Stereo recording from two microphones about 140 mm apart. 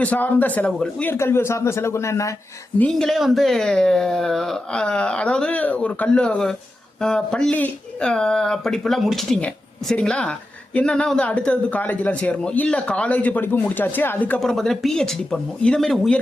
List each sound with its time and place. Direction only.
0.0 s speech: 10° left (ahead or behind)
2.7 s speech: 5° left (ahead or behind)